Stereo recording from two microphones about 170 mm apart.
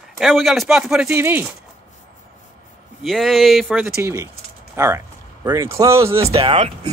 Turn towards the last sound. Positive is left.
turn(degrees=-35)  # may be behind; listen again after turning